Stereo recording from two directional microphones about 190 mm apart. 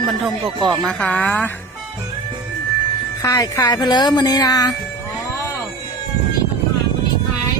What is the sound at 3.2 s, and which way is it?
Speech, 15° left (ahead or behind).